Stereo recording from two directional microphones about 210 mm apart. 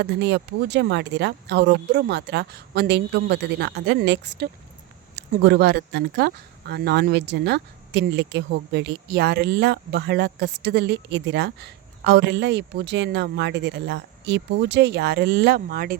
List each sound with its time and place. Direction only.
0.0 s speech: 55° right (ahead or behind)